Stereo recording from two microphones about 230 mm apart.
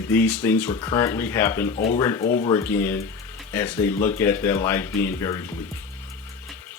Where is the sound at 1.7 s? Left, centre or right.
Left.